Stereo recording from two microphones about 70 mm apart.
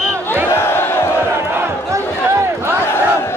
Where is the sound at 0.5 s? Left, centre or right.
Left.